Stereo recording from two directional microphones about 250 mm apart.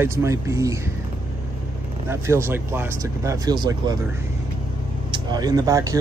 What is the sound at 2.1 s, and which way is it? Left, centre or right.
Speech, centre.